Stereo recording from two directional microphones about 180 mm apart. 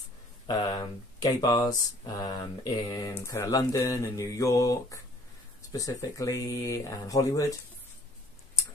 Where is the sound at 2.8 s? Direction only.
20° left (ahead or behind).